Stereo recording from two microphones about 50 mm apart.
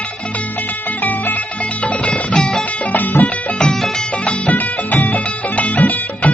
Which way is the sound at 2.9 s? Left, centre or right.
Left.